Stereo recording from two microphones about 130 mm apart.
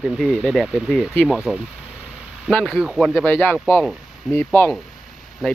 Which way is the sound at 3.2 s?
15° left (ahead or behind).